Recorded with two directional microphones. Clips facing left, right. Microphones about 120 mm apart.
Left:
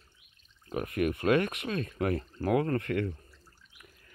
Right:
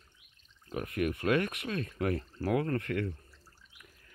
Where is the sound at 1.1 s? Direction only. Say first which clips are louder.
Left 4 dB; 25° left (ahead or behind).